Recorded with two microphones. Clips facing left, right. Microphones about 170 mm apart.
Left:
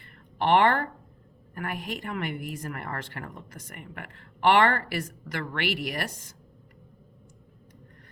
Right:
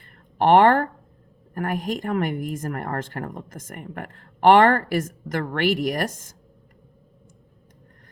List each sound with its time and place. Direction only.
0.3 s speech: 45° right (ahead or behind)